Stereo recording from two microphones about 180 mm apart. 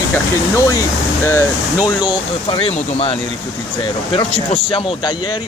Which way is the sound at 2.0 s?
25° left (ahead or behind).